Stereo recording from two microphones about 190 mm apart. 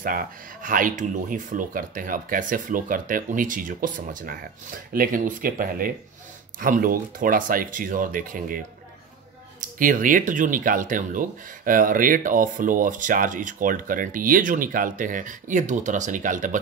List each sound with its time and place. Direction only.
0.0 s speech: 50° right (ahead or behind)
9.8 s speech: 45° right (ahead or behind)